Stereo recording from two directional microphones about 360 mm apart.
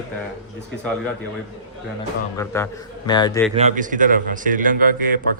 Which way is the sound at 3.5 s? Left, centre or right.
Centre.